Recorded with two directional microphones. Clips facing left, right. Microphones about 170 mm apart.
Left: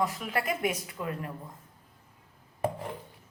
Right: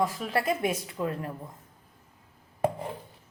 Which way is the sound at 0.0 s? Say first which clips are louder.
Right 3 dB; 30° right (ahead or behind).